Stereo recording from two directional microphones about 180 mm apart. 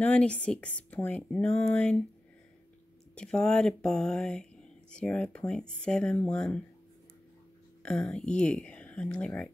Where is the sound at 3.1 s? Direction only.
5° left (ahead or behind).